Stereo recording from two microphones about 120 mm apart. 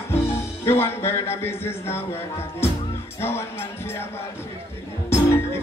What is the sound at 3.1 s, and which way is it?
Music, 20° left (ahead or behind).